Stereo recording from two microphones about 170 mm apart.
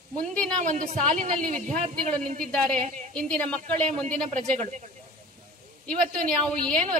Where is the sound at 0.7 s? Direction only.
50° right (ahead or behind).